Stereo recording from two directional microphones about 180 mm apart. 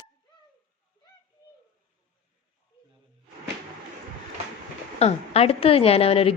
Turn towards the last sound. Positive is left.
turn(degrees=30)  # may be behind; listen again after turning